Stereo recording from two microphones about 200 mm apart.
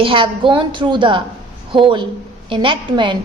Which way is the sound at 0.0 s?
25° right (ahead or behind).